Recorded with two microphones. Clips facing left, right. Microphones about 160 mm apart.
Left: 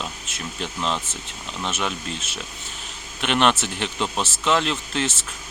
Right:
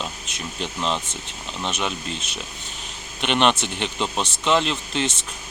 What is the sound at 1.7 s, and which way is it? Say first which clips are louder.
Speech: even; 5° left (ahead or behind).